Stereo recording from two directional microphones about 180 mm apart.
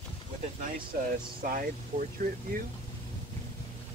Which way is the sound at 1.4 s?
50° right (ahead or behind).